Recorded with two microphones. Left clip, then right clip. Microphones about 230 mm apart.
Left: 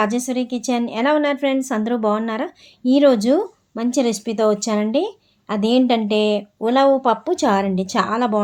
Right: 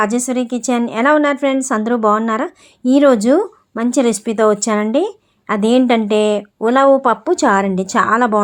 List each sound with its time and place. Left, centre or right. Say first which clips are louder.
0.0 s a woman's voice: right 4 dB; centre